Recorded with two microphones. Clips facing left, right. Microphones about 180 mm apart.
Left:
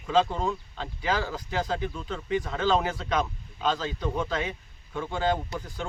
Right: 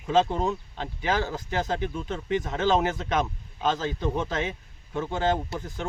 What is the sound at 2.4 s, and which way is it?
Speech, 25° right (ahead or behind).